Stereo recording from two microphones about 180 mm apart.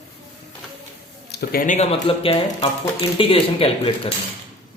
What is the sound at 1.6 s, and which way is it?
Speech, 40° left (ahead or behind).